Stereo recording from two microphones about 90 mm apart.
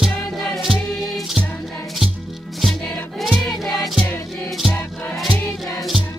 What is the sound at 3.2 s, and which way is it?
Music, centre (ahead or behind).